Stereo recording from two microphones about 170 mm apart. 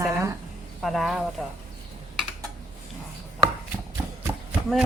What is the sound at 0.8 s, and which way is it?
Speech, centre (ahead or behind).